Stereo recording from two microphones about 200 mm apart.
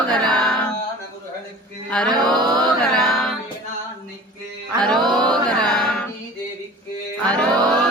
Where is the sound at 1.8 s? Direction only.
5° left (ahead or behind).